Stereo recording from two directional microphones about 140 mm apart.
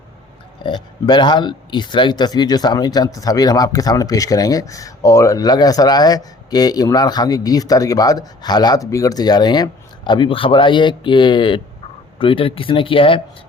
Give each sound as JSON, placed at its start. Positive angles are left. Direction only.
{"t": 0.6, "sound": "speech", "side_deg": 35}